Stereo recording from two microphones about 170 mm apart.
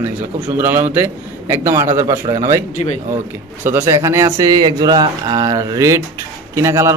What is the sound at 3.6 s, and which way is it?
Speech, 15° right (ahead or behind).